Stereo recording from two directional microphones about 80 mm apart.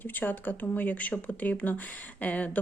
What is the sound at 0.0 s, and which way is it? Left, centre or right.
A woman's voice, left.